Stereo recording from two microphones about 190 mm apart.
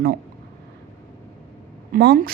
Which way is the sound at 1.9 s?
55° right (ahead or behind).